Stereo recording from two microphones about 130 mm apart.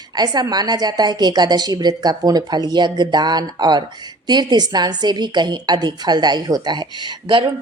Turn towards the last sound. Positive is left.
turn(degrees=-35)  # may be behind; listen again after turning